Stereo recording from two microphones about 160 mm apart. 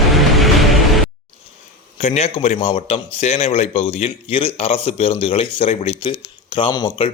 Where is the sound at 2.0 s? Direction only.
40° left (ahead or behind).